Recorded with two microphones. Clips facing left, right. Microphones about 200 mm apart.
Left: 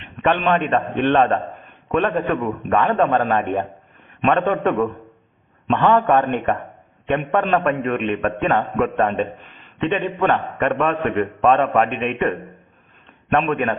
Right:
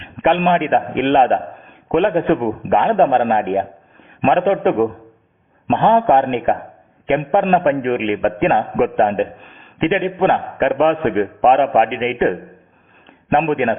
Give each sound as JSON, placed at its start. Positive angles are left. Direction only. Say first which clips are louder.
{"t": 0.2, "sound": "a man's voice", "louder": "right 3 dB", "side_deg": -20}
{"t": 13.5, "sound": "a man's voice", "louder": "right 4 dB", "side_deg": -25}